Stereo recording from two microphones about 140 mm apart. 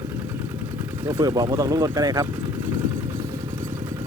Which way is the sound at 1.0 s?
30° right (ahead or behind).